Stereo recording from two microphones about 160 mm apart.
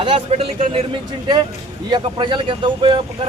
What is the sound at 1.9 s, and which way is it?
Speech, 30° right (ahead or behind).